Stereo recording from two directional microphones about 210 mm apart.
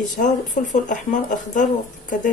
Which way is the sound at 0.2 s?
35° left (ahead or behind).